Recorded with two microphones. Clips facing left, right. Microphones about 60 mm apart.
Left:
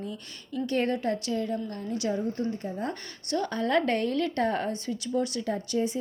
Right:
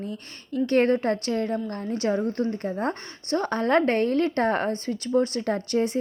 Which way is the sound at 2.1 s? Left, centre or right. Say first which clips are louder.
Right 4 dB; right.